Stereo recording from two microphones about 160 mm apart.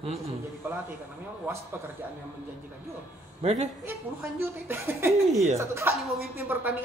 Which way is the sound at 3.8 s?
15° right (ahead or behind).